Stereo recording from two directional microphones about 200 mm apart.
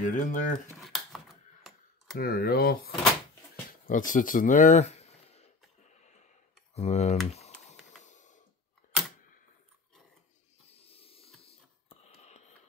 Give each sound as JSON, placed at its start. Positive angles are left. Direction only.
{"t": 0.0, "sound": "speech", "side_deg": 40}
{"t": 0.7, "sound": "computer keyboard", "side_deg": 0}
{"t": 2.1, "sound": "speech", "side_deg": 50}
{"t": 5.9, "sound": "clicking", "side_deg": 35}
{"t": 7.2, "sound": "typing", "side_deg": 30}
{"t": 8.0, "sound": "a sound", "side_deg": 35}
{"t": 10.7, "sound": "hiss", "side_deg": 30}
{"t": 12.0, "sound": "whispering", "side_deg": 35}